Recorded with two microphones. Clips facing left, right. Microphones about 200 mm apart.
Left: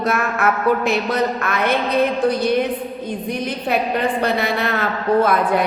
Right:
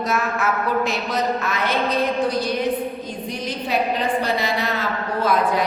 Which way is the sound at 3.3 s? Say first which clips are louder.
Left 3 dB; 55° left (ahead or behind).